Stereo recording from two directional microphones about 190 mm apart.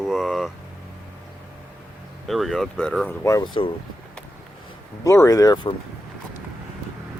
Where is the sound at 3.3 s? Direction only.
20° left (ahead or behind).